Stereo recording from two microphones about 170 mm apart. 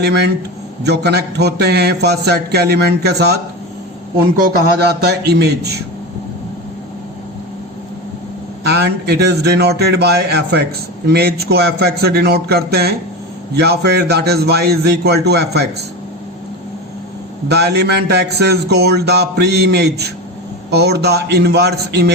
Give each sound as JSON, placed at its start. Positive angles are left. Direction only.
{"t": 0.0, "sound": "a man's voice", "side_deg": -75}
{"t": 4.9, "sound": "a man's voice", "side_deg": -75}
{"t": 8.6, "sound": "a man's voice", "side_deg": -75}
{"t": 17.5, "sound": "a man's voice", "side_deg": -75}